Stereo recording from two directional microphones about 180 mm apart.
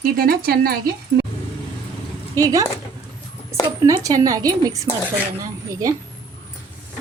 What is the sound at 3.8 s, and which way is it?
A woman's voice, 20° right (ahead or behind).